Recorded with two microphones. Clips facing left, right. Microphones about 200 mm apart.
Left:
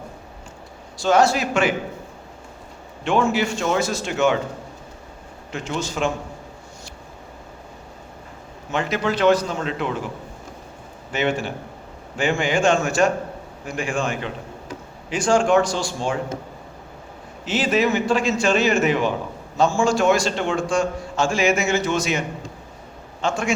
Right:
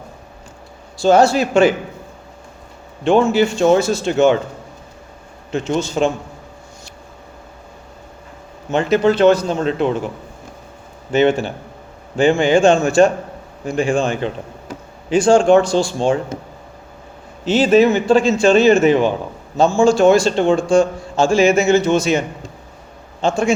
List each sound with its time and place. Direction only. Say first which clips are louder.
1.0 s a man's voice: right 5 dB; 30° right (ahead or behind)
3.0 s a man's voice: right 7 dB; 30° right (ahead or behind)
5.5 s a man's voice: right 8 dB; 25° right (ahead or behind)
8.7 s a man's voice: right 8 dB; 25° right (ahead or behind)
11.1 s a man's voice: right 8 dB; 25° right (ahead or behind)
17.4 s a man's voice: right 8 dB; 30° right (ahead or behind)
23.2 s a man's voice: right 6 dB; 25° right (ahead or behind)